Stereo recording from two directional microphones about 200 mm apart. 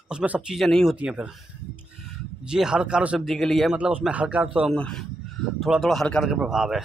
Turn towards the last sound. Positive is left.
turn(degrees=-5)  # may be behind; listen again after turning